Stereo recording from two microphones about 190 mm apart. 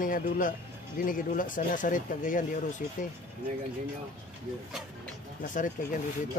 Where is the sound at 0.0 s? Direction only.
45° left (ahead or behind).